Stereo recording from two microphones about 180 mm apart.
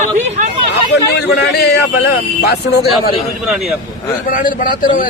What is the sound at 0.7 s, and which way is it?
Speech, 70° left (ahead or behind).